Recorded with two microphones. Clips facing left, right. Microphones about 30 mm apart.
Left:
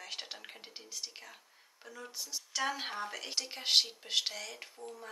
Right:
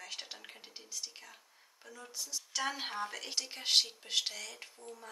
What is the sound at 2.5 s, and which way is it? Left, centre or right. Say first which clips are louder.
Speech: left 1 dB; centre.